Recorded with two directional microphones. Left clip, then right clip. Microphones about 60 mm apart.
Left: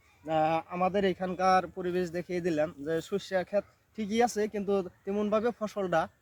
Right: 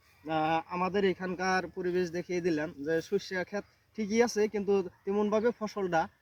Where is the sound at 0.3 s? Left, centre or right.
Left.